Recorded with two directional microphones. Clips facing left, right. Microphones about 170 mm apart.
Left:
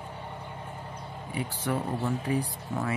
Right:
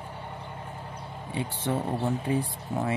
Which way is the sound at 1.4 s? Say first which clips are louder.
Right 1 dB; 25° right (ahead or behind).